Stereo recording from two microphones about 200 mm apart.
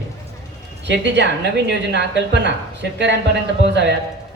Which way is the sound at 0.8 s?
60° right (ahead or behind).